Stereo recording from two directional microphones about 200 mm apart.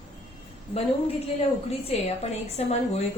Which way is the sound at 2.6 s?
35° left (ahead or behind).